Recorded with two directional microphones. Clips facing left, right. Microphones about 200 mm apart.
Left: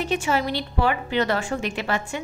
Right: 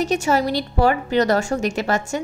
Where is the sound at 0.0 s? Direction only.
40° right (ahead or behind).